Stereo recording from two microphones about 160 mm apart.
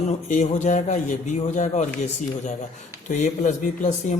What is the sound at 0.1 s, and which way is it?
Speech, 50° left (ahead or behind).